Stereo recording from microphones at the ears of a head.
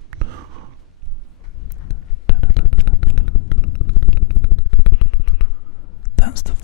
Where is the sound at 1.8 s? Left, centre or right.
Left.